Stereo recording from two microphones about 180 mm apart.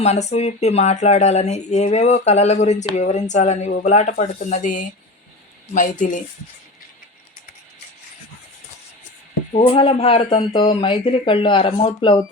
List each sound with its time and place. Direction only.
0.0 s speech: 40° left (ahead or behind)
9.5 s speech: 35° left (ahead or behind)